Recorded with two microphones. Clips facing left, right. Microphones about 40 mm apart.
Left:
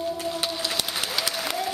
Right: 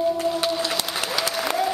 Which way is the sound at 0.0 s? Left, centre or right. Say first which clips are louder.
Right 6 dB; centre.